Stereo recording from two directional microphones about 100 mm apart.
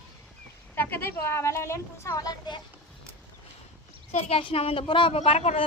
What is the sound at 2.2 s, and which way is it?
Speech, 40° left (ahead or behind).